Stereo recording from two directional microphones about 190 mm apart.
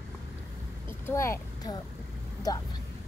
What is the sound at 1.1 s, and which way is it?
Speech, 15° left (ahead or behind).